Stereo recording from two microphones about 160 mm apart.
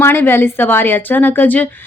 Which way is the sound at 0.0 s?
15° left (ahead or behind).